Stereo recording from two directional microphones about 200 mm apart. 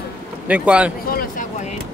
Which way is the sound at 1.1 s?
45° left (ahead or behind).